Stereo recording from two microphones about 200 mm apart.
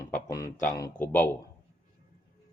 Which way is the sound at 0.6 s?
15° left (ahead or behind).